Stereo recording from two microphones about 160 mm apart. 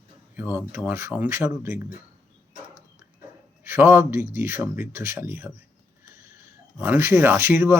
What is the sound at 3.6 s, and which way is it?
Speech, 15° right (ahead or behind).